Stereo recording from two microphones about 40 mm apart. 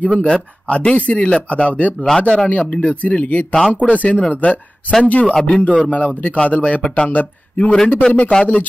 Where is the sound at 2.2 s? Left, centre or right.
Left.